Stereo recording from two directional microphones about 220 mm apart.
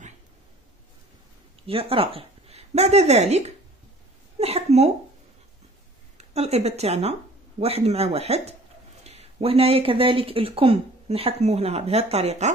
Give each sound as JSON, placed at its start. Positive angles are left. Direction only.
{"t": 1.7, "sound": "speech", "side_deg": -25}
{"t": 4.4, "sound": "a sound", "side_deg": -25}
{"t": 6.1, "sound": "speech", "side_deg": -30}